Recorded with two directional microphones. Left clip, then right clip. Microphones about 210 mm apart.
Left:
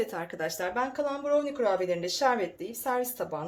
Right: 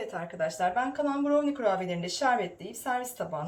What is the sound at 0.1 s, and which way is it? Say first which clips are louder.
Speech: right 1 dB; 50° left (ahead or behind).